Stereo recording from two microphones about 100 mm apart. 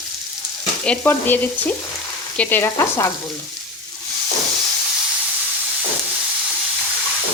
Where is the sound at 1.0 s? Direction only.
20° left (ahead or behind).